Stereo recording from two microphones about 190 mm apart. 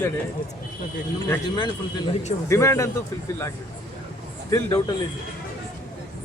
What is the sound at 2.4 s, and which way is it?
Speech, 15° left (ahead or behind).